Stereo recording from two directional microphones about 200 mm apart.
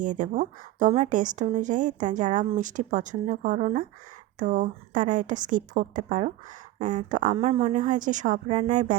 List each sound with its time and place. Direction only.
0.0 s a woman's voice: 40° right (ahead or behind)
7.3 s a woman's voice: 30° right (ahead or behind)